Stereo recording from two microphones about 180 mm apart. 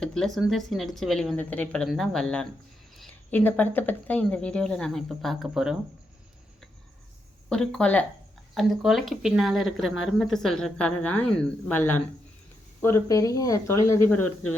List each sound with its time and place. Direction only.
0.0 s speech: 5° left (ahead or behind)
7.5 s speech: 5° left (ahead or behind)